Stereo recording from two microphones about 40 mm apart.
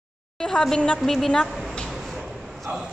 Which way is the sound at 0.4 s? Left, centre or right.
Centre.